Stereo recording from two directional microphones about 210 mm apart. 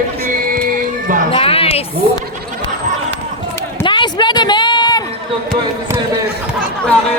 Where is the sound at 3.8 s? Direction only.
20° left (ahead or behind).